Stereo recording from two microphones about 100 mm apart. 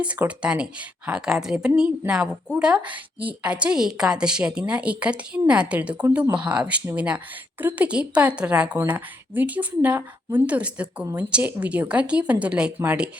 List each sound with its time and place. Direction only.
0.0 s a woman's voice: 10° right (ahead or behind)